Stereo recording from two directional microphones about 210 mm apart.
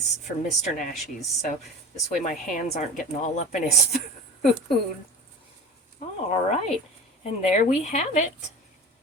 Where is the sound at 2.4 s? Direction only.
40° left (ahead or behind).